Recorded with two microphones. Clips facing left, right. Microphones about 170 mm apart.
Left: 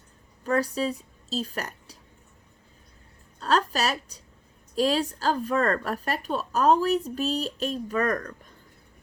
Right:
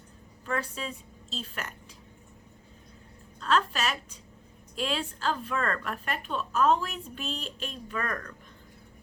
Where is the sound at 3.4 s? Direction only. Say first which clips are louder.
Left 3 dB; 40° left (ahead or behind).